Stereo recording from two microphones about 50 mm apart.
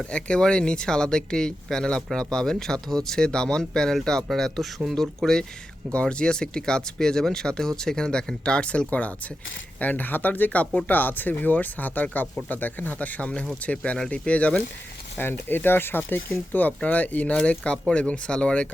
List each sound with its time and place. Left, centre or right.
0.1 s speech: left
5.9 s speech: left
15.2 s speech: left